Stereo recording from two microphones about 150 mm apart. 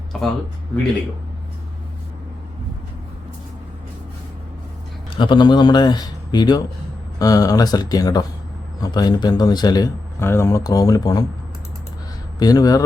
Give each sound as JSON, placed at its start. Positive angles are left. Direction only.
{"t": 0.1, "sound": "speech", "side_deg": 5}
{"t": 5.1, "sound": "speech", "side_deg": 30}
{"t": 12.4, "sound": "speech", "side_deg": 25}